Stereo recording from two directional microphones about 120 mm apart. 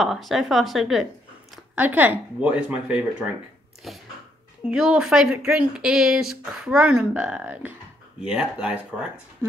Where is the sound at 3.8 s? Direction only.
Centre (ahead or behind).